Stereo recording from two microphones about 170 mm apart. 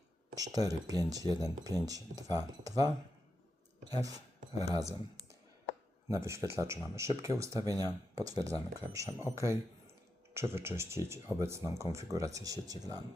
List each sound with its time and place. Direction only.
0.5 s speech: 20° right (ahead or behind)
3.9 s a man's voice: 20° right (ahead or behind)